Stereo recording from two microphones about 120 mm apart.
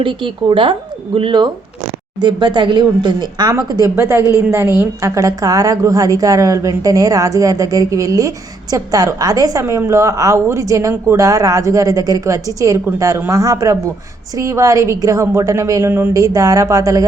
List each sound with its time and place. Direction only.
0.0 s speech: 45° right (ahead or behind)
3.5 s a woman's voice: 25° right (ahead or behind)